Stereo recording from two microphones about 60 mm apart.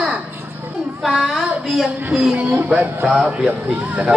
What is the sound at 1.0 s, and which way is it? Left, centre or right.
A child's voice, centre.